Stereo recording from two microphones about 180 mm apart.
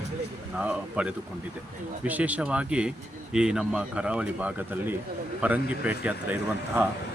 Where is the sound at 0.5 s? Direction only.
5° right (ahead or behind).